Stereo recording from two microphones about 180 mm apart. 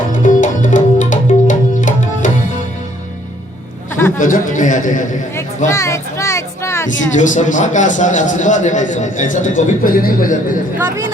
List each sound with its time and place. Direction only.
0.1 s music: 45° left (ahead or behind)
4.2 s a man's voice: 45° left (ahead or behind)
5.6 s children playing: 15° left (ahead or behind)
7.1 s a man's voice: 45° left (ahead or behind)
10.8 s speech: 10° right (ahead or behind)